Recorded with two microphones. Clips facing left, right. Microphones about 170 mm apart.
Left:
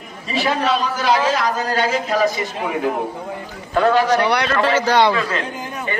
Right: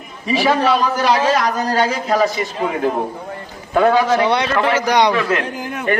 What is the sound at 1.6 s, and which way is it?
Speech, 35° right (ahead or behind).